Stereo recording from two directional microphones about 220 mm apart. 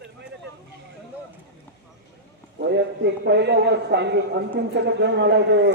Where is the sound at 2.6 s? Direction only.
50° right (ahead or behind).